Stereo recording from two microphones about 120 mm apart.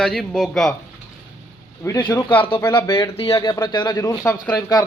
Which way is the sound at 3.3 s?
35° left (ahead or behind).